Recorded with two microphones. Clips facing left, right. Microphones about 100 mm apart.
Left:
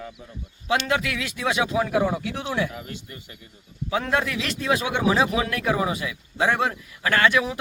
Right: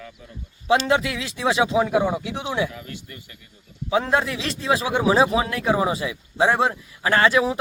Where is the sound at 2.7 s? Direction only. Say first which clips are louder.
Left 1 dB; 30° left (ahead or behind).